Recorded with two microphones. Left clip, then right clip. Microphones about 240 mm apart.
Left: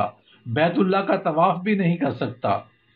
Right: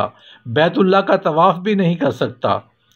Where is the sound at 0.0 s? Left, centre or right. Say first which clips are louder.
Right 4 dB; right.